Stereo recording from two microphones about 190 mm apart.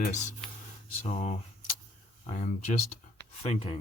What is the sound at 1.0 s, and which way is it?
Speech, 35° left (ahead or behind).